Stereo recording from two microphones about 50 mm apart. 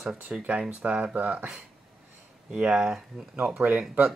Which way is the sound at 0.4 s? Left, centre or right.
Right.